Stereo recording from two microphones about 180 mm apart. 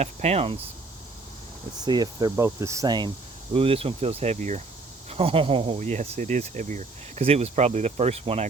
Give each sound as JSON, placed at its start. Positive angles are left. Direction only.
{"t": 0.0, "sound": "speech", "side_deg": -35}
{"t": 1.8, "sound": "speech", "side_deg": -20}